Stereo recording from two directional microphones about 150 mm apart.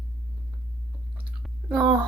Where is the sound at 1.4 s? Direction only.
Centre (ahead or behind).